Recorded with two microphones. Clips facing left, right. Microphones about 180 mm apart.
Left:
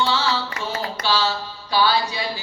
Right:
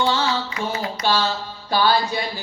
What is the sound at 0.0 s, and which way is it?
Music, 50° right (ahead or behind).